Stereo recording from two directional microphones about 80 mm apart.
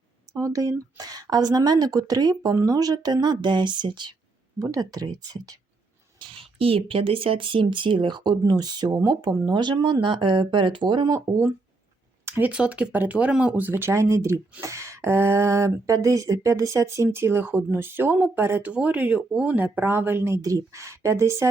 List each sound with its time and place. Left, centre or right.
0.3 s a woman's voice: right
4.6 s a woman's voice: right
6.8 s speech: right
9.5 s speech: right
12.2 s speech: right
18.7 s speech: centre
20.4 s speech: right